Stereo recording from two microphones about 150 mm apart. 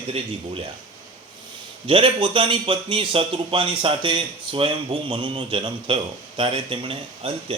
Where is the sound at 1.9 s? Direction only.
35° right (ahead or behind).